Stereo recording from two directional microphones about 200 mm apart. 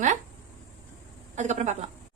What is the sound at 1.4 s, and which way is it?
Speech, 35° right (ahead or behind).